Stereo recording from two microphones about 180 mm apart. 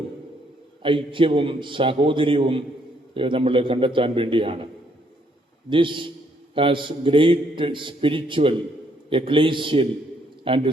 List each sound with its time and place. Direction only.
0.8 s a man's voice: 30° right (ahead or behind)
5.6 s a man's voice: 25° right (ahead or behind)